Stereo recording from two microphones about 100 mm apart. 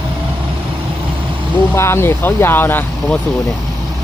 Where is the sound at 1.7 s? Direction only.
25° left (ahead or behind).